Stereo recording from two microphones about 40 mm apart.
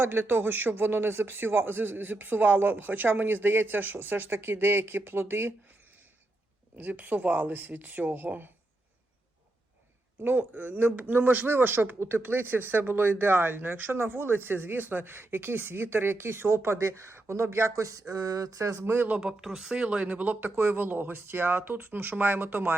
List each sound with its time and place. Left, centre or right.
0.0 s speech: right
6.7 s speech: right
10.2 s speech: right
10.6 s speech: right
15.1 s speech: right
18.8 s speech: right
19.3 s speech: centre
20.1 s speech: right
21.2 s speech: right